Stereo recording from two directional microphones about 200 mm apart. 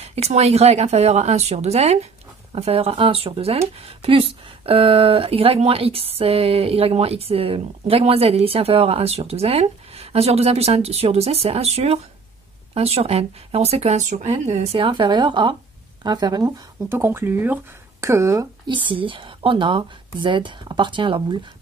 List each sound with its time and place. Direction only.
0.0 s speech: 30° right (ahead or behind)